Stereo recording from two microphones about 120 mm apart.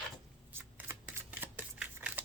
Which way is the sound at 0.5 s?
20° right (ahead or behind).